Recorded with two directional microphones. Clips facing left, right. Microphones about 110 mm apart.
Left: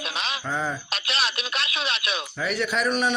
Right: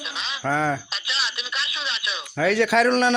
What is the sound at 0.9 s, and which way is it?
Telephone, 55° left (ahead or behind).